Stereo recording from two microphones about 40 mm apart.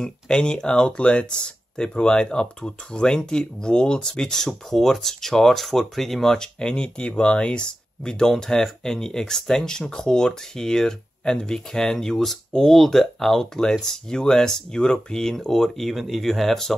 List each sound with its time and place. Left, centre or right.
0.0 s speech: centre
6.3 s speech: centre